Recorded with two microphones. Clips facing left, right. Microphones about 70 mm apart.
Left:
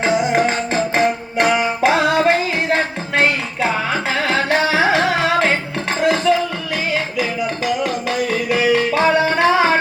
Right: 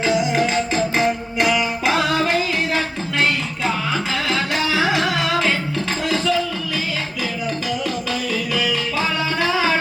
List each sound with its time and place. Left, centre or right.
0.0 s music: left
7.9 s music: left